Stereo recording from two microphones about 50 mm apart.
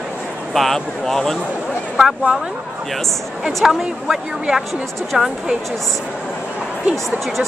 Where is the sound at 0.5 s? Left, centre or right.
Centre.